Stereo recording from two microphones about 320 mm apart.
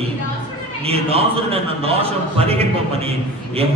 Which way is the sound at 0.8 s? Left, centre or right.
Centre.